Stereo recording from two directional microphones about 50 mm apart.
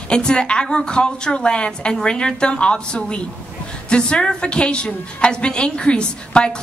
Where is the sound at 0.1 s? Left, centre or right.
Centre.